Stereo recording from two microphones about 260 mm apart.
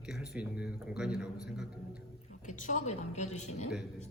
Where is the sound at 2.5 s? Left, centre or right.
Left.